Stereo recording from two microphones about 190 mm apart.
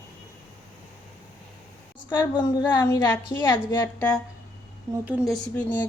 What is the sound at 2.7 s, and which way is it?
A woman's voice, 15° left (ahead or behind).